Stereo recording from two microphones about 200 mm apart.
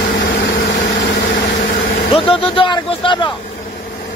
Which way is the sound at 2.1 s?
25° left (ahead or behind).